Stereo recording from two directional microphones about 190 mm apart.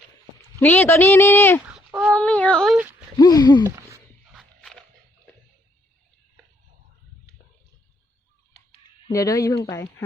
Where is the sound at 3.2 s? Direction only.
20° left (ahead or behind).